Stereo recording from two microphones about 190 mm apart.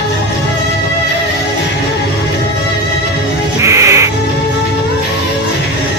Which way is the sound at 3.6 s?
15° right (ahead or behind).